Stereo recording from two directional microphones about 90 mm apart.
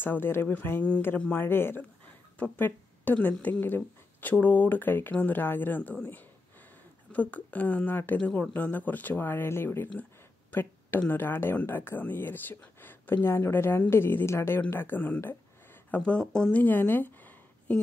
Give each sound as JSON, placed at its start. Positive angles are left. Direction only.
{"t": 0.0, "sound": "speech", "side_deg": 25}
{"t": 16.1, "sound": "speech", "side_deg": 10}
{"t": 16.6, "sound": "a sound", "side_deg": 20}